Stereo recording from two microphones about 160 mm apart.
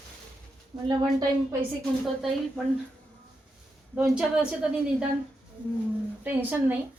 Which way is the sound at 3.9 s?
5° right (ahead or behind).